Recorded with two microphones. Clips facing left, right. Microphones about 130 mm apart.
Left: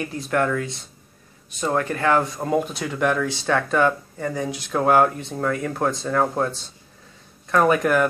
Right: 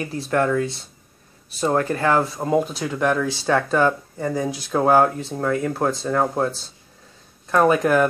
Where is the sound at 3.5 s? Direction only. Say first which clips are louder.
Right 1 dB; 5° right (ahead or behind).